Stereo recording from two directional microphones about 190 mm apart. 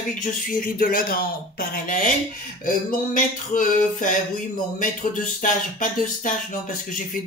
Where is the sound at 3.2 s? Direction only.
45° left (ahead or behind).